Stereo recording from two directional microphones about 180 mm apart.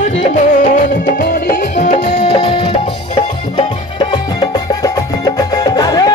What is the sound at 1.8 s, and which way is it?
Music, 40° left (ahead or behind).